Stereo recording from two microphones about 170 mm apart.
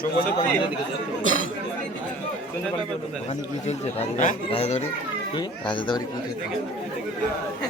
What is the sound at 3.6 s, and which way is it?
Speech, 45° left (ahead or behind).